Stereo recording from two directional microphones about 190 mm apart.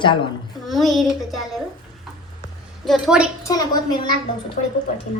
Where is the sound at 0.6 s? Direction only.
Centre (ahead or behind).